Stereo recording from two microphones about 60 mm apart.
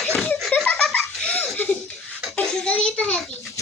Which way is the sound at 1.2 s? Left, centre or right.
Left.